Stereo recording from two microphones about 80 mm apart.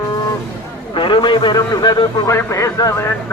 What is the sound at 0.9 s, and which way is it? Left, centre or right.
Speech, left.